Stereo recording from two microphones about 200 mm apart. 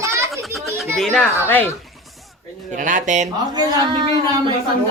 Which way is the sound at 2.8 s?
40° right (ahead or behind).